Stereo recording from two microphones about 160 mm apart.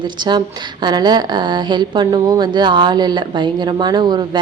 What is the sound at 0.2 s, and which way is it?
A woman's voice, 25° right (ahead or behind).